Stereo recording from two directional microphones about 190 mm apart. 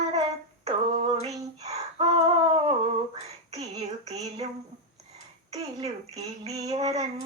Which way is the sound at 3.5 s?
35° right (ahead or behind).